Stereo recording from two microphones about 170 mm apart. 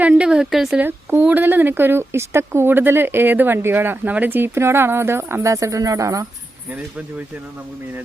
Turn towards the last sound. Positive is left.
turn(degrees=-10)  # may be behind; listen again after turning